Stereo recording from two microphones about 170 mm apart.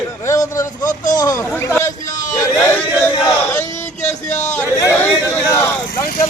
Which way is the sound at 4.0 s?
45° left (ahead or behind).